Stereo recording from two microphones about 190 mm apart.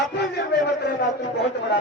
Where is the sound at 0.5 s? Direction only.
60° left (ahead or behind).